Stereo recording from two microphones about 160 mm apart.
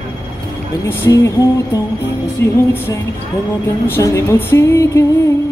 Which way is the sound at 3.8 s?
15° left (ahead or behind).